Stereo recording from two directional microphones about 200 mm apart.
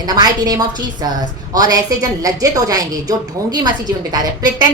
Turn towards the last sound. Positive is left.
turn(degrees=-20)  # may be behind; listen again after turning